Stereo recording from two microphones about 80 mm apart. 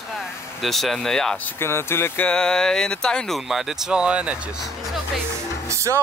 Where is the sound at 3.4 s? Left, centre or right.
Centre.